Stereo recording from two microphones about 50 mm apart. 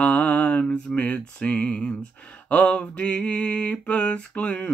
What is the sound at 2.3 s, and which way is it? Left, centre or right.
Mantra, left.